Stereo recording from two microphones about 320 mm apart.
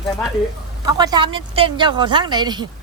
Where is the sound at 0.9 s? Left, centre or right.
Centre.